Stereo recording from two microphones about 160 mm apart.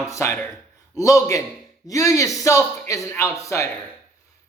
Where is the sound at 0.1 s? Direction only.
15° left (ahead or behind).